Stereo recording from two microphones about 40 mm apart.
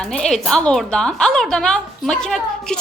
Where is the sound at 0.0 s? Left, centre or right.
Centre.